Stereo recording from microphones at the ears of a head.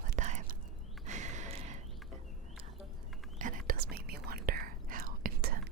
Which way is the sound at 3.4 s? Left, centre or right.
Right.